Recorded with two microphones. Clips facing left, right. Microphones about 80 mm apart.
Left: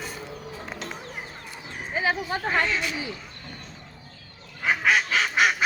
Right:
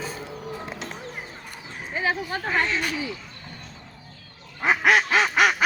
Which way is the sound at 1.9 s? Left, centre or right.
Centre.